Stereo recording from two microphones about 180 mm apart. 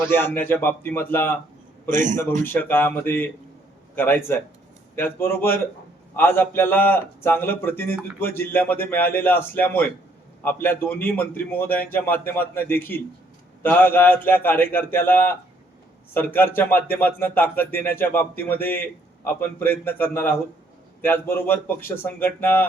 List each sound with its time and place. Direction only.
0.1 s speech: 10° left (ahead or behind)
1.9 s a man's voice: 45° right (ahead or behind)
2.4 s speech: 10° left (ahead or behind)